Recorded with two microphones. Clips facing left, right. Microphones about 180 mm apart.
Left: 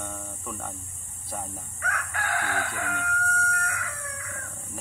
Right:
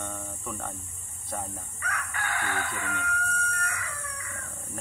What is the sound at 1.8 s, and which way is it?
Chicken, 90° left.